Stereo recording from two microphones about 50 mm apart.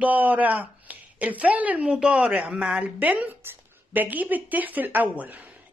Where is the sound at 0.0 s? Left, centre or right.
Right; by 2.8 s centre.